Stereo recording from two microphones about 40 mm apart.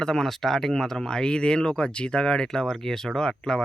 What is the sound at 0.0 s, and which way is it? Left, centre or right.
Speech, centre.